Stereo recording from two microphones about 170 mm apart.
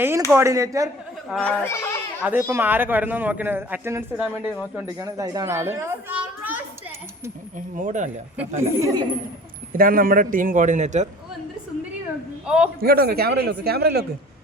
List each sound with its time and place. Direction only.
0.3 s a man's voice: 15° right (ahead or behind)
1.4 s speech: 10° left (ahead or behind)
2.2 s a man's voice: 15° right (ahead or behind)
4.9 s a child's voice: 20° right (ahead or behind)
7.8 s speech: 50° right (ahead or behind)
8.4 s a man's voice: 15° right (ahead or behind)
9.7 s speech: 60° right (ahead or behind)
12.5 s a man's voice: 5° right (ahead or behind)
12.8 s a man's voice: 65° right (ahead or behind)